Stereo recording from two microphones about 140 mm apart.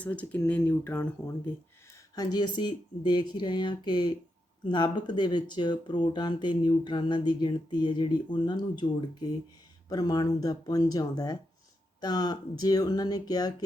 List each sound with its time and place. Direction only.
0.0 s speech: 10° left (ahead or behind)
2.1 s speech: 30° left (ahead or behind)